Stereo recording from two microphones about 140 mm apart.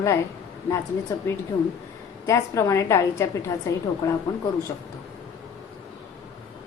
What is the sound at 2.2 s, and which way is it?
A woman's voice, 20° left (ahead or behind).